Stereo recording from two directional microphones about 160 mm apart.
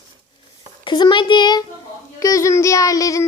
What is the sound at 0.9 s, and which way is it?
Child singing, 30° left (ahead or behind).